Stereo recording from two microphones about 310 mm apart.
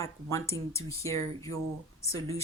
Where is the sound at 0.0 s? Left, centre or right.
Centre.